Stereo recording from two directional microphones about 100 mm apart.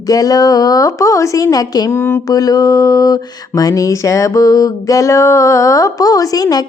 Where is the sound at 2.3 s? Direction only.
40° left (ahead or behind).